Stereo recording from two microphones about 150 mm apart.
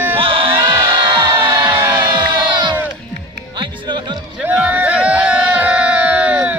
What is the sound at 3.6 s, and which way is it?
Music, 30° right (ahead or behind).